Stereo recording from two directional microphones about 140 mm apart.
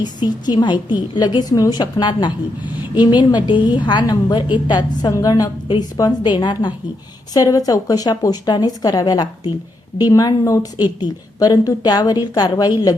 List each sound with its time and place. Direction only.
0.0 s a woman's voice: 30° left (ahead or behind)